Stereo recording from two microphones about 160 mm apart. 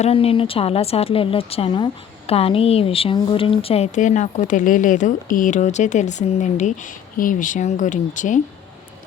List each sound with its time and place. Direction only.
0.0 s a woman's voice: 35° left (ahead or behind)